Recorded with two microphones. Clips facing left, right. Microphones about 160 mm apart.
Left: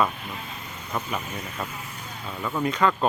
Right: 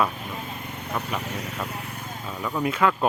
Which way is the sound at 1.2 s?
80° right.